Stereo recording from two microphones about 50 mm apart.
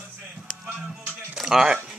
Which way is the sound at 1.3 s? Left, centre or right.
Centre.